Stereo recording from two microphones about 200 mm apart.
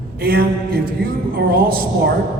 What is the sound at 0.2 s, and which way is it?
A woman's voice, 50° right (ahead or behind).